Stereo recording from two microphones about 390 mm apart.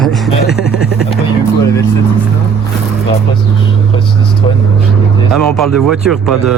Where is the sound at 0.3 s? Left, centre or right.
Left.